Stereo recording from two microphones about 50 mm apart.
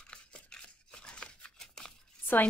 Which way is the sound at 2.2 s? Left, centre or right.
Left.